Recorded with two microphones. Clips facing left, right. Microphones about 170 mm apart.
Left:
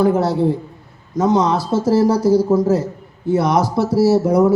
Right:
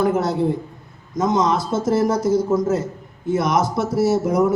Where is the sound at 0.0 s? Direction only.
35° left (ahead or behind).